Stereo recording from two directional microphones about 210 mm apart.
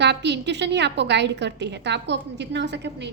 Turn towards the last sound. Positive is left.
turn(degrees=-55)  # may be behind; listen again after turning